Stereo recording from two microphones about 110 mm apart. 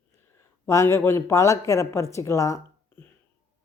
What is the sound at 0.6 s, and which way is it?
Speech, 30° left (ahead or behind).